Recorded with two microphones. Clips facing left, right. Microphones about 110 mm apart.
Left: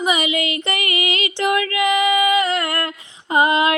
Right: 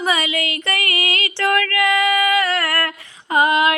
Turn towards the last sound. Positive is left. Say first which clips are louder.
# even
turn(degrees=25)  # may be behind; listen again after turning